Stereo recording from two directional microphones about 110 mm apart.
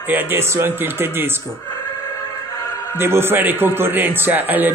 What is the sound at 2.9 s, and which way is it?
Speech, 20° right (ahead or behind).